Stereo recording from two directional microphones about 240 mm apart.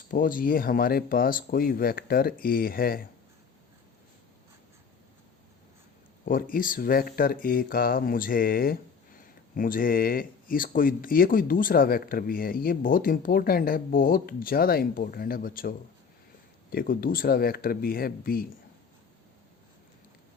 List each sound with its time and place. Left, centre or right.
0.1 s speech: left
6.2 s speech: left
16.7 s speech: left